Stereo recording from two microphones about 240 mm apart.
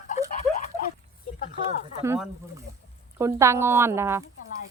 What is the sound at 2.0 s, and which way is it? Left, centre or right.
Speech, centre.